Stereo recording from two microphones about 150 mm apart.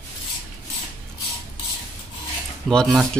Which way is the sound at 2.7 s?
5° left (ahead or behind).